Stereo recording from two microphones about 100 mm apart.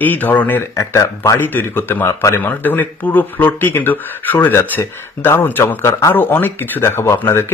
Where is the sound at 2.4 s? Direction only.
20° left (ahead or behind).